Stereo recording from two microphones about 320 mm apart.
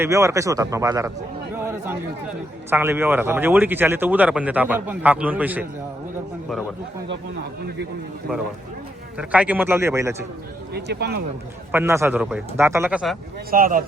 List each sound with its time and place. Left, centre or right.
0.0 s a man's voice: centre
1.5 s chatter: centre
2.6 s a man's voice: centre
9.1 s a man's voice: centre
10.8 s speech: right
11.7 s a man's voice: centre
13.5 s speech: right